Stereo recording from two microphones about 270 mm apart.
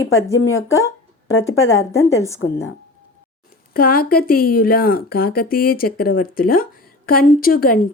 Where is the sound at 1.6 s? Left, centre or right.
Left.